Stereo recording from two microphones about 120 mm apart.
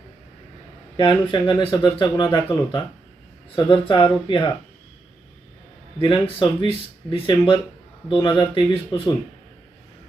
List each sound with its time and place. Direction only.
0.9 s speech: 45° left (ahead or behind)
6.0 s speech: 45° left (ahead or behind)